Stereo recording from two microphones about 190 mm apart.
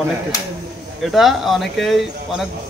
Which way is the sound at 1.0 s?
Centre (ahead or behind).